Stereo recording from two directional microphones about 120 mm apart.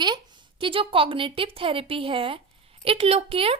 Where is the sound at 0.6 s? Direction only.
45° right (ahead or behind).